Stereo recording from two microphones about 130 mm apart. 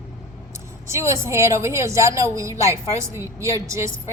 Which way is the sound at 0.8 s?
20° right (ahead or behind).